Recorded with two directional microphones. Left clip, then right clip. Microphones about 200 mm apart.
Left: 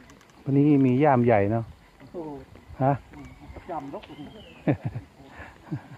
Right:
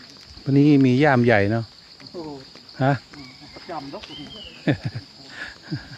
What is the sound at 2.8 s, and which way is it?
Speech, 35° right (ahead or behind).